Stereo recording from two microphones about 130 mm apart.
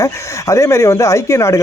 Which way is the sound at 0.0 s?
25° left (ahead or behind).